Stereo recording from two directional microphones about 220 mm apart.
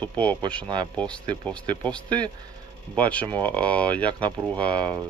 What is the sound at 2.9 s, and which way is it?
Speech, 5° left (ahead or behind).